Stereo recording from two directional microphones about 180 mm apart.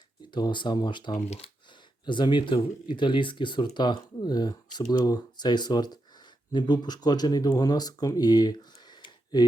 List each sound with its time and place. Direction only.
0.3 s speech: 25° left (ahead or behind)